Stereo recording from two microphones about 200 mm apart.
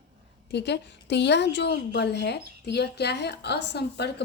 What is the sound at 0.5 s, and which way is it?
A woman's voice, 60° left (ahead or behind).